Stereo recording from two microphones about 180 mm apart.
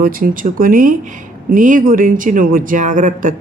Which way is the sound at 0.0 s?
50° right (ahead or behind).